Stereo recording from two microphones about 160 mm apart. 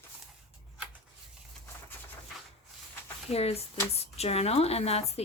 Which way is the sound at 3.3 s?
40° left (ahead or behind).